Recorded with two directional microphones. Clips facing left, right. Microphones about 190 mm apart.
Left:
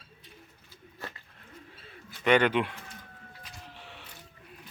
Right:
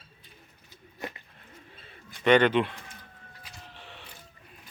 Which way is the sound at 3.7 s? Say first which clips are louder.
Even; 10° left (ahead or behind).